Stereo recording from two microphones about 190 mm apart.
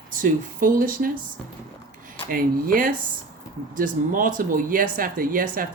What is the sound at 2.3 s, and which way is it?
Speech, 50° right (ahead or behind).